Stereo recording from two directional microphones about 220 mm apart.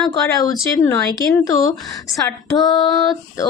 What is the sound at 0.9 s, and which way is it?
Speech, 10° left (ahead or behind).